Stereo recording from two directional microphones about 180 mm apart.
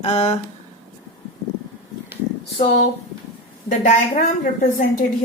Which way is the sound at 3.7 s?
45° left (ahead or behind).